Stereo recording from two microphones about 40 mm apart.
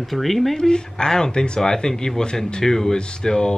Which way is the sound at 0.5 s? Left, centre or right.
Centre.